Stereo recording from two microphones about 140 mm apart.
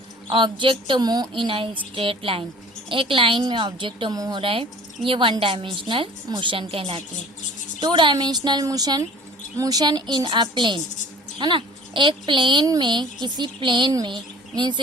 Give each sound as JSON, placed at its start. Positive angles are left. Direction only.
{"t": 0.3, "sound": "speech", "side_deg": -35}
{"t": 4.4, "sound": "a woman's voice", "side_deg": -40}